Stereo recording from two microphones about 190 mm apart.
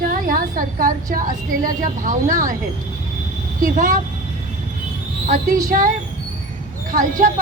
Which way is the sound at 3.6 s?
45° right (ahead or behind).